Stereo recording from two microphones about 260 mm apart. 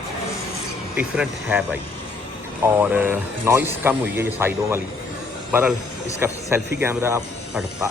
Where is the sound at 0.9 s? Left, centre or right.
Centre.